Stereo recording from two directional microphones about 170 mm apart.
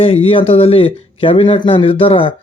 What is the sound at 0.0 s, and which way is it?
Speech, 35° left (ahead or behind).